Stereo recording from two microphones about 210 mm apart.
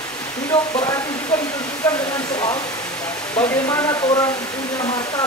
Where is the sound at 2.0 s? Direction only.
20° left (ahead or behind).